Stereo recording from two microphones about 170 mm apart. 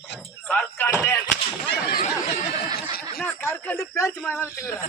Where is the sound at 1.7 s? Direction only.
65° left (ahead or behind).